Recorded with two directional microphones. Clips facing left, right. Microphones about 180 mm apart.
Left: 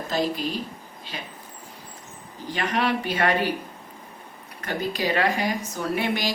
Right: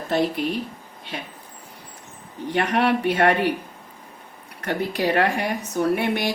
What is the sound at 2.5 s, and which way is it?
Speech, 65° right (ahead or behind).